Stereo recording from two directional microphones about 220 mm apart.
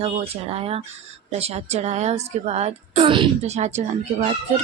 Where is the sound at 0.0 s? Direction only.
30° right (ahead or behind).